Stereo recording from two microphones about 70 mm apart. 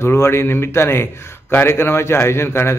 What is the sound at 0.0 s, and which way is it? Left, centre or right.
A man's voice, left.